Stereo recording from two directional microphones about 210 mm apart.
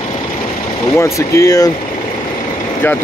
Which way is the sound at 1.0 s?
15° left (ahead or behind).